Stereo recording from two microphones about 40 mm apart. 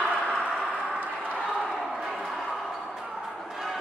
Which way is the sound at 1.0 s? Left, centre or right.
Right.